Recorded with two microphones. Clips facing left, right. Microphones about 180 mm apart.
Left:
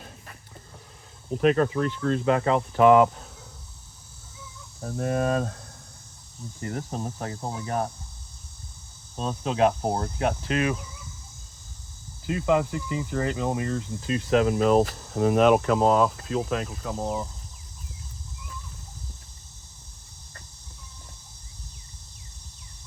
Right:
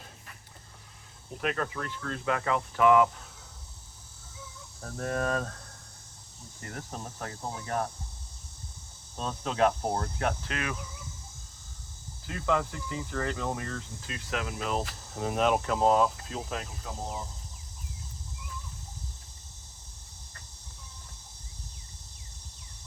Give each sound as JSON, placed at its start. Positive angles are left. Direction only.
{"t": 1.3, "sound": "speech", "side_deg": 25}
{"t": 4.8, "sound": "speech", "side_deg": 20}
{"t": 6.6, "sound": "speech", "side_deg": 25}
{"t": 9.1, "sound": "speech", "side_deg": 15}
{"t": 12.2, "sound": "speech", "side_deg": 15}
{"t": 15.1, "sound": "speech", "side_deg": 70}